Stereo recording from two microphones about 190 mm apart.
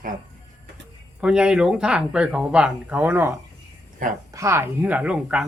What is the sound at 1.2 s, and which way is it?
Speech, 5° right (ahead or behind).